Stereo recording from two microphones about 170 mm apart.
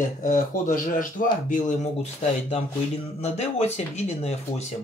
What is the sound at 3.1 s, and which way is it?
Speech, 40° left (ahead or behind).